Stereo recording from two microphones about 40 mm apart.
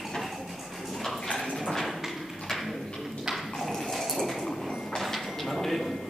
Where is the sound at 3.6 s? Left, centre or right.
Centre.